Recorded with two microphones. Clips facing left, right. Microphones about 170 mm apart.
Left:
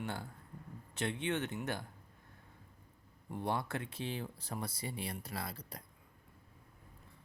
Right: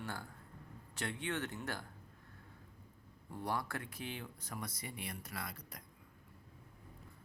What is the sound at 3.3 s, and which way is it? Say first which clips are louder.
Speech: left 3 dB; 20° left (ahead or behind).